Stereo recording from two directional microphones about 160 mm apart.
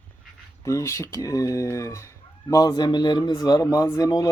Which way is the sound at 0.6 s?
20° left (ahead or behind).